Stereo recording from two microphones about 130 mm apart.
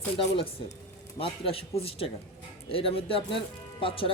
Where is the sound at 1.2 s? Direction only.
45° left (ahead or behind).